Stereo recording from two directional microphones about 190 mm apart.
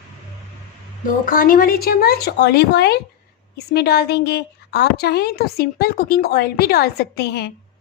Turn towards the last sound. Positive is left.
turn(degrees=60)  # may be behind; listen again after turning